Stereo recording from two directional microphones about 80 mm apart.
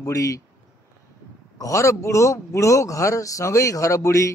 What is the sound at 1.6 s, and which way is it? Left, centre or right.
A man's voice, left.